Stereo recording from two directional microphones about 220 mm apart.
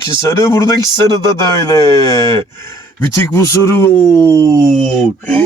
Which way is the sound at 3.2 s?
10° left (ahead or behind).